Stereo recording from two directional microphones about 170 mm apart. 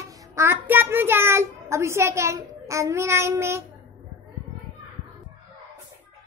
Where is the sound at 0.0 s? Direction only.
15° right (ahead or behind).